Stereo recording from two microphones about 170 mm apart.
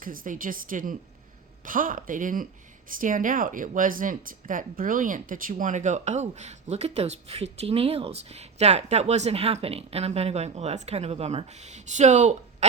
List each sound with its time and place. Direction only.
0.0 s speech: 55° right (ahead or behind)